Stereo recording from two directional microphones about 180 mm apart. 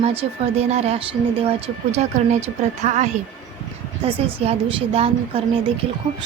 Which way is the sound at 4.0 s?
30° right (ahead or behind).